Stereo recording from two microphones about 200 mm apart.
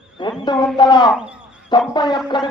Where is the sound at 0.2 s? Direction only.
25° left (ahead or behind).